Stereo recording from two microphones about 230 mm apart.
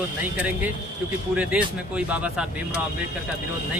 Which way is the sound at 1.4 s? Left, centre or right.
Centre.